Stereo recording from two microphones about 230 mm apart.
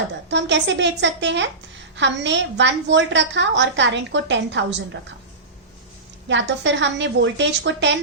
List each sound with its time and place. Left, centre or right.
0.3 s a woman's voice: right
6.2 s a woman's voice: right